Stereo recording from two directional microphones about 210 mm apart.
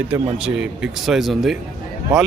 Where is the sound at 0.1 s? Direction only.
5° right (ahead or behind).